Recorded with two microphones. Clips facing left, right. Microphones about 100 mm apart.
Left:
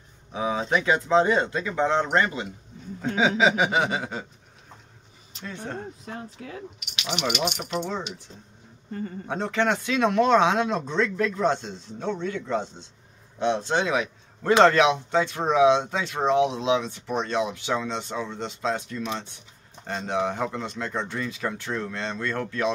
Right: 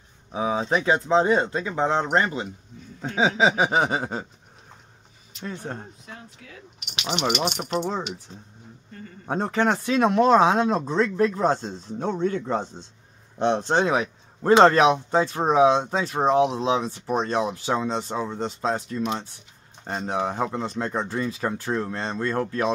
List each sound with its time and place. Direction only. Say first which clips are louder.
0.3 s speech: right 1 dB; 25° right (ahead or behind)
6.0 s speech: left 6 dB; 40° left (ahead or behind)
7.0 s speech: right 2 dB; 35° right (ahead or behind)
9.3 s a man's voice: right 2 dB; 40° right (ahead or behind)